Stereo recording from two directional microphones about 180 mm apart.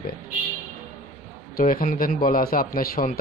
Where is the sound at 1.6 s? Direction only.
50° left (ahead or behind).